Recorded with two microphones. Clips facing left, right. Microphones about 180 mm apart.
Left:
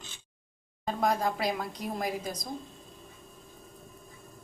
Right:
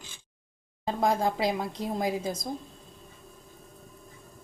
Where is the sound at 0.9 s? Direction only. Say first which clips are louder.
Right 2 dB; 25° right (ahead or behind).